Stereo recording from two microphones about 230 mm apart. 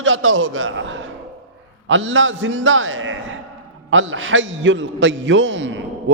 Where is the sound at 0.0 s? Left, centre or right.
Right.